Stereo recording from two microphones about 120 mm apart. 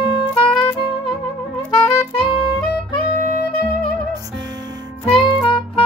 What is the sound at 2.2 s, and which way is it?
Music, 45° left (ahead or behind).